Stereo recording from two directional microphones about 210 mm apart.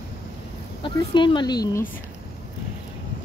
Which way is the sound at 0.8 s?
25° left (ahead or behind).